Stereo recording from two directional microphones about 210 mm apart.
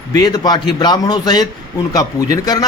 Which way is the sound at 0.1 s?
20° left (ahead or behind).